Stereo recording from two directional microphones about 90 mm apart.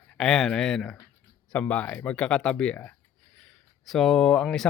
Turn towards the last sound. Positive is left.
turn(degrees=10)  # may be behind; listen again after turning